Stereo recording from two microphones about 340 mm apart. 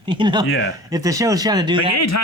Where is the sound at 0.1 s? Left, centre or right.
Centre.